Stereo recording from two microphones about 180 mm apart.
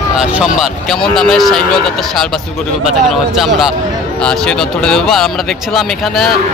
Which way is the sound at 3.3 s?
Centre (ahead or behind).